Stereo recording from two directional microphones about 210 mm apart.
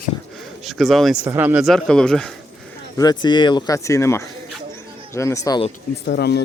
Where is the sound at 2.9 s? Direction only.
20° left (ahead or behind).